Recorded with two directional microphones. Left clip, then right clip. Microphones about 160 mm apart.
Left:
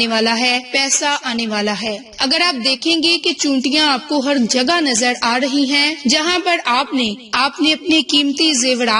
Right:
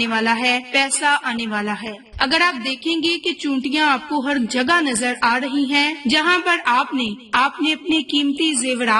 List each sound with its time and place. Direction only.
0.0 s a woman's voice: 30° left (ahead or behind)